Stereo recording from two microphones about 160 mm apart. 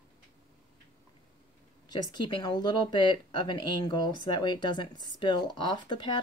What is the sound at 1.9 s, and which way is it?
Speech, 30° left (ahead or behind).